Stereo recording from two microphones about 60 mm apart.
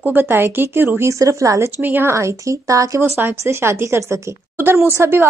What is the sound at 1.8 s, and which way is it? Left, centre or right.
Speech, right.